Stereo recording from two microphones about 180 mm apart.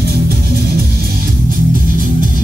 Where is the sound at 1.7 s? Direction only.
50° right (ahead or behind).